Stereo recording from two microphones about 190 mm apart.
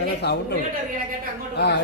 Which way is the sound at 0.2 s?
60° left (ahead or behind).